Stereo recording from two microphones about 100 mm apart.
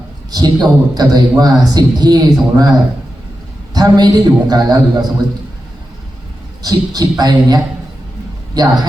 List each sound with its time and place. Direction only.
0.3 s a man's voice: 40° right (ahead or behind)
3.8 s a man's voice: 40° right (ahead or behind)
6.6 s a man's voice: 40° right (ahead or behind)